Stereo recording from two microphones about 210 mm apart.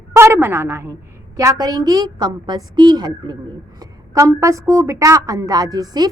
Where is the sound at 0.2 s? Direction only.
10° right (ahead or behind).